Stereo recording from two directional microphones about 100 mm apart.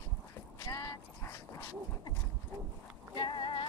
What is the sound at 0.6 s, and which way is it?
Clip-clop, 35° left (ahead or behind).